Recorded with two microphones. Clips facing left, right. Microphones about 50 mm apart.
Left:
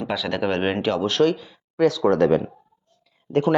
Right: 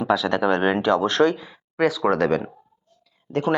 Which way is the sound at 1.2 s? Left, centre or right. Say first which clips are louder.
Left 1 dB; right.